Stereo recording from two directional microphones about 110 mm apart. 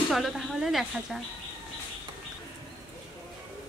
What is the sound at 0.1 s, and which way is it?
Child singing, centre (ahead or behind).